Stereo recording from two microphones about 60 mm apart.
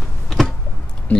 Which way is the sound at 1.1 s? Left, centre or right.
Left.